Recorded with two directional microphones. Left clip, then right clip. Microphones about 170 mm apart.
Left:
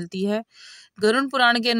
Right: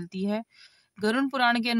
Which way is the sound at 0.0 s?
25° left (ahead or behind).